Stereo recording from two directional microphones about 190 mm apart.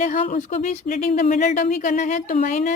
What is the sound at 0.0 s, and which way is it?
A woman's voice, 45° left (ahead or behind).